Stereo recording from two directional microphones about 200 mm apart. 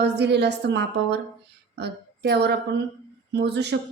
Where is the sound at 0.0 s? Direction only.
55° right (ahead or behind).